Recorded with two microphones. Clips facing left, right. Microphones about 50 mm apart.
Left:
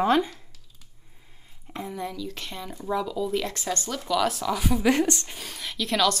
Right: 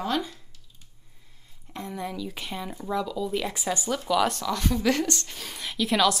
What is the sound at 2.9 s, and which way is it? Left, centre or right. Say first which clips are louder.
Speech: left 2 dB; centre.